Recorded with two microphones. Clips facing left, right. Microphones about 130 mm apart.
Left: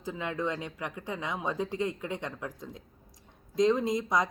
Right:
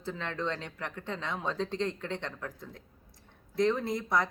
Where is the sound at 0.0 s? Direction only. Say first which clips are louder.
Left 2 dB; 10° left (ahead or behind).